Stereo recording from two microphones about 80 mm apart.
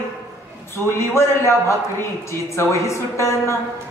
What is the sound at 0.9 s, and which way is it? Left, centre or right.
A man's voice, left.